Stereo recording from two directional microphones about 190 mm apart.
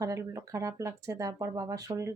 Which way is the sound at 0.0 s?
15° right (ahead or behind).